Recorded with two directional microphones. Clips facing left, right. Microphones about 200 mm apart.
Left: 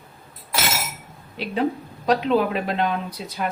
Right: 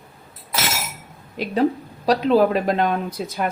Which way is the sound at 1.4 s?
45° right (ahead or behind).